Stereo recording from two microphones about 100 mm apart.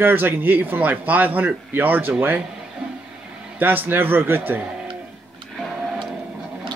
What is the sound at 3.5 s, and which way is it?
Speech, 20° right (ahead or behind).